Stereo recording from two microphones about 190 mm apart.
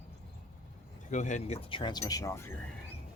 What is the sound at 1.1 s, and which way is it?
Speech, 40° left (ahead or behind).